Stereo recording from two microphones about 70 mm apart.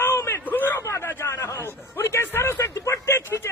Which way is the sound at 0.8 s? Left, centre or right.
Left.